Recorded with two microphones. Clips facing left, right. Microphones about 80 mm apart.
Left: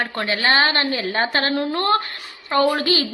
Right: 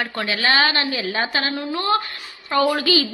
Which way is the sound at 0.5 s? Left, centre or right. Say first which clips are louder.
Left 1 dB; left.